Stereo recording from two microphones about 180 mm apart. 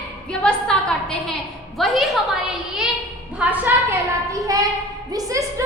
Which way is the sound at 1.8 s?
Centre (ahead or behind).